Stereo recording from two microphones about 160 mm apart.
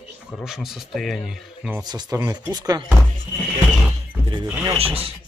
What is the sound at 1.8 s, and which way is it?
Speech, 25° right (ahead or behind).